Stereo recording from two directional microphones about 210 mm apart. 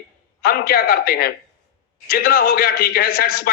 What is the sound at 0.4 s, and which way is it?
Speech, 45° left (ahead or behind).